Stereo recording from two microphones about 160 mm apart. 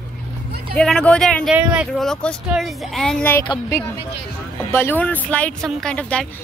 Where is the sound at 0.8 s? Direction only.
5° left (ahead or behind).